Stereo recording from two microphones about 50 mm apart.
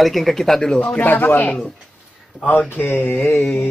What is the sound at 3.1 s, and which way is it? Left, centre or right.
Speech, left.